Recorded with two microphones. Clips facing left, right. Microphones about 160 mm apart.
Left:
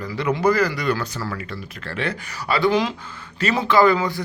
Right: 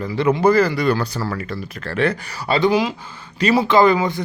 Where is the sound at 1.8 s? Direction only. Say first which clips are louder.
Right 7 dB; 45° right (ahead or behind).